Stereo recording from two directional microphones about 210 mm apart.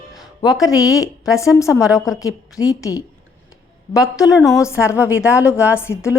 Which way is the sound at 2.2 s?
15° left (ahead or behind).